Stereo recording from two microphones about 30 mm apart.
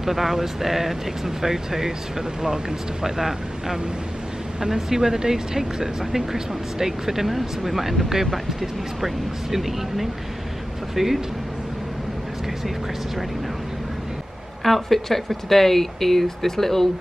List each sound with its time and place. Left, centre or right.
0.0 s speech: centre
14.6 s speech: centre